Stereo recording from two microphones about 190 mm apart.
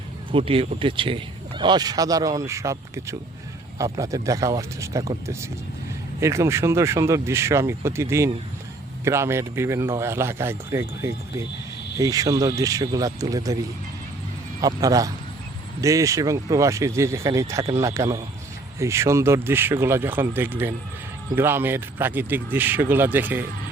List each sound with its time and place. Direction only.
0.3 s a man's voice: 30° right (ahead or behind); by 23.5 s 10° right (ahead or behind)